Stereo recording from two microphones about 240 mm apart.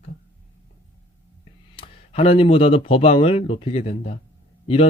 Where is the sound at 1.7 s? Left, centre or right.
Left.